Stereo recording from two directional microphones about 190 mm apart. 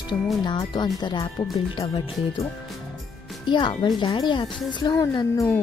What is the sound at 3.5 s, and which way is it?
Speech, 25° left (ahead or behind).